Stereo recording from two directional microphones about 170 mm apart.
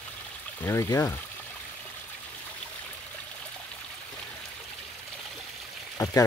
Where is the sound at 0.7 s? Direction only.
15° left (ahead or behind).